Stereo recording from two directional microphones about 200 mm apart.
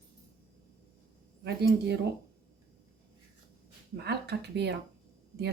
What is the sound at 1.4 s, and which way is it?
Speech, 55° right (ahead or behind).